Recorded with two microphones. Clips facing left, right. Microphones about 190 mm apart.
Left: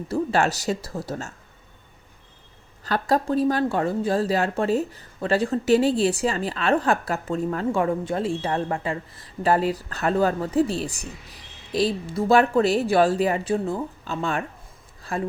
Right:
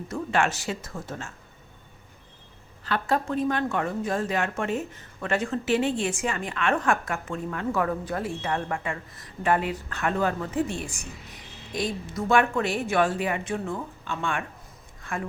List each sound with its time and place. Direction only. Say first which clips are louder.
0.1 s speech: left 4 dB; 35° left (ahead or behind)
2.8 s speech: left 4 dB; 40° left (ahead or behind)